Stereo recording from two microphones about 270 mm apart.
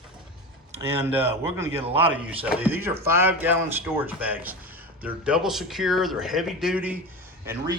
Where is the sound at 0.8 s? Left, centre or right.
Centre.